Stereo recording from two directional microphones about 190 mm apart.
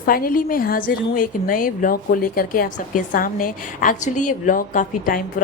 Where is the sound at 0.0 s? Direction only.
50° left (ahead or behind).